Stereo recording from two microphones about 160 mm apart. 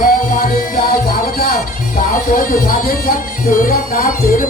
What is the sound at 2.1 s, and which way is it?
Speech, 60° left (ahead or behind).